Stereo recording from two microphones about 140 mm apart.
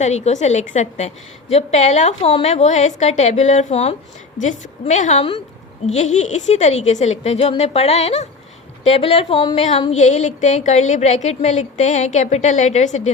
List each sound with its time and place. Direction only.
0.0 s a woman's voice: 55° left (ahead or behind)